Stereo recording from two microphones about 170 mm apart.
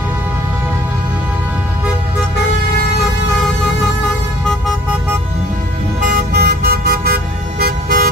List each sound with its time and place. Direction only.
6.0 s vehicle: 65° right (ahead or behind)